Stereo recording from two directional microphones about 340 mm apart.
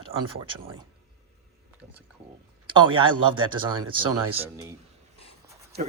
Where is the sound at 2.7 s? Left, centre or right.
Centre.